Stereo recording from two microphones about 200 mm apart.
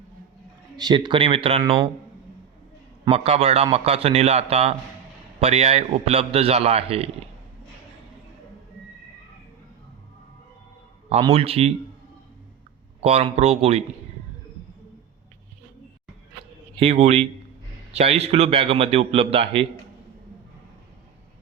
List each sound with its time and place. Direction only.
0.8 s a man's voice: 20° right (ahead or behind)
3.0 s a man's voice: 30° right (ahead or behind)
11.1 s a man's voice: 30° right (ahead or behind)
13.0 s a man's voice: 30° right (ahead or behind)
16.8 s a man's voice: 30° right (ahead or behind)